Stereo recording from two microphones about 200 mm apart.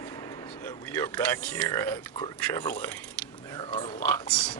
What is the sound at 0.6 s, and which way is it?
Speech, 10° left (ahead or behind).